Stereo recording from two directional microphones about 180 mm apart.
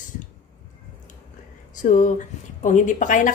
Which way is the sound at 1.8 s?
45° left (ahead or behind).